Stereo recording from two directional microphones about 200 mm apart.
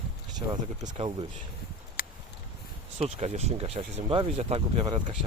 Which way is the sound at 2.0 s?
45° left (ahead or behind).